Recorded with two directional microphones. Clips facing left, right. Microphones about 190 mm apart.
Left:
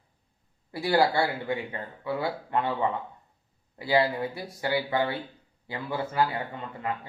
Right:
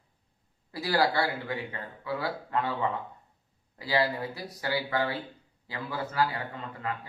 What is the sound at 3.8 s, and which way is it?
Speech, 25° left (ahead or behind).